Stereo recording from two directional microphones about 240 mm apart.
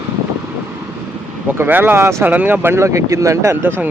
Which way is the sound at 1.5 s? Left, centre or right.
Centre.